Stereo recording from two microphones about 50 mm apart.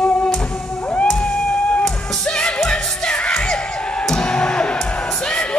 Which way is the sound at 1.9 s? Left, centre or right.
Centre.